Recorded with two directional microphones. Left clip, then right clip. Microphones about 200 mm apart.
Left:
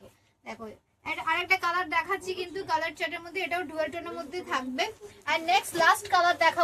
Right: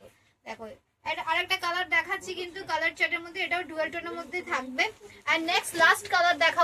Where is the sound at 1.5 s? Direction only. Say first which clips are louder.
Left 3 dB; 45° right (ahead or behind).